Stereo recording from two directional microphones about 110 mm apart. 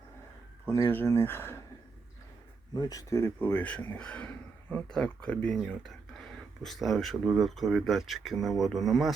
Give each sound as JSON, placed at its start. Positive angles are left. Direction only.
{"t": 0.7, "sound": "speech", "side_deg": 20}
{"t": 2.7, "sound": "speech", "side_deg": 35}